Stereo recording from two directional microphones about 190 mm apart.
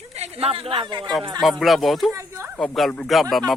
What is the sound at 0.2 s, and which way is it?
Speech, 30° right (ahead or behind).